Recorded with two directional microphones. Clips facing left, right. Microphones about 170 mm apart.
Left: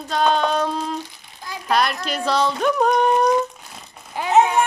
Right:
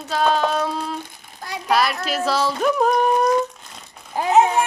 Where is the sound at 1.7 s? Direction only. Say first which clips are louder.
Right 1 dB; 5° right (ahead or behind).